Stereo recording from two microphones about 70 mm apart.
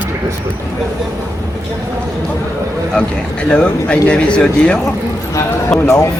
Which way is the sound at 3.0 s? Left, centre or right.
Centre.